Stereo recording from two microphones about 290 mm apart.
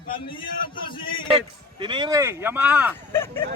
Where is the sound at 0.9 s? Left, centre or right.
Centre.